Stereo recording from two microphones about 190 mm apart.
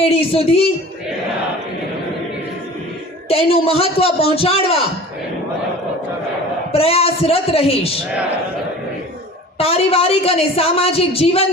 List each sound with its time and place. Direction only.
0.0 s a woman's voice: 30° left (ahead or behind)
3.2 s a woman's voice: 30° left (ahead or behind)
6.7 s a woman's voice: 30° left (ahead or behind)
9.6 s a woman's voice: 30° left (ahead or behind)